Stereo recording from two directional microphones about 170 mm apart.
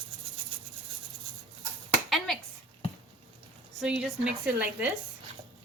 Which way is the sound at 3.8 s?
5° right (ahead or behind).